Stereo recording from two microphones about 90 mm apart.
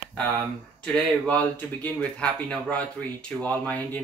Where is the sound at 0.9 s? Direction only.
15° left (ahead or behind).